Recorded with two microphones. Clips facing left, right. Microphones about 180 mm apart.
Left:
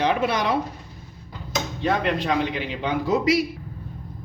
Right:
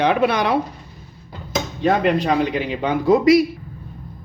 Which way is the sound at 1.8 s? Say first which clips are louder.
Right 6 dB; 45° right (ahead or behind).